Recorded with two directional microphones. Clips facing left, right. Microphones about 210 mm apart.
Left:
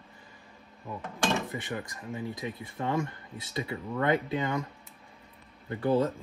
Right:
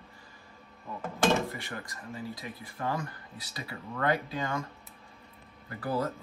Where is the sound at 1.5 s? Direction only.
20° left (ahead or behind).